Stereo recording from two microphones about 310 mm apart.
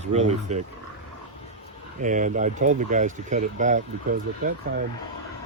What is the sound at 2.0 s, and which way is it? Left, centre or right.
Speech, right.